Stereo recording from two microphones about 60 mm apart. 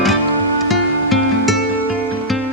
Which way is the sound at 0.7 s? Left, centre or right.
Centre.